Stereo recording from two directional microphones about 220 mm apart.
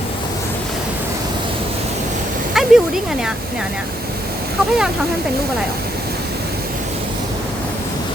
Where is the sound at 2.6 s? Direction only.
Centre (ahead or behind).